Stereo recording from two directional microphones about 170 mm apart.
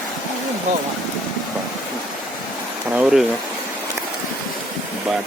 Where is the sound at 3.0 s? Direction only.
5° right (ahead or behind).